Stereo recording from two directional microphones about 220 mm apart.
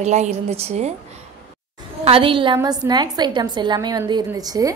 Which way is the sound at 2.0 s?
25° right (ahead or behind).